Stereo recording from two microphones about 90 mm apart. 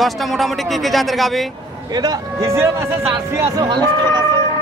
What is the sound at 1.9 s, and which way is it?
A man's voice, 45° right (ahead or behind).